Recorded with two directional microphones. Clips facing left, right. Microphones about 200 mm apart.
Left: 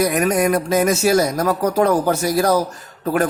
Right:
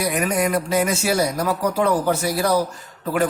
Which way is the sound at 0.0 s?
45° left (ahead or behind).